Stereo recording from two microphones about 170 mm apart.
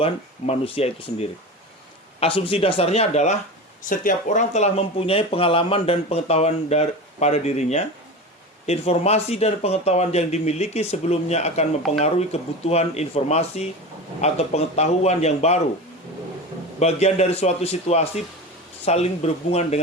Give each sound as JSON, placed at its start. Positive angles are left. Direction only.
{"t": 0.0, "sound": "speech", "side_deg": 35}
{"t": 3.8, "sound": "speech", "side_deg": 50}
{"t": 16.8, "sound": "speech", "side_deg": 40}